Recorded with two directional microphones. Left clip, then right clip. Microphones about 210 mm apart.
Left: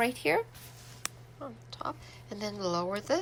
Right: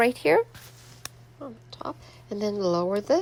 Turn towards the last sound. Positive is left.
turn(degrees=-25)  # may be behind; listen again after turning